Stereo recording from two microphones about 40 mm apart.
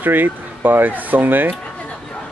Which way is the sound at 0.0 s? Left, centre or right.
Right.